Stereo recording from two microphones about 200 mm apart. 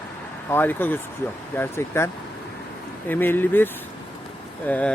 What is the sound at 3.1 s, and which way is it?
Speech, 10° left (ahead or behind).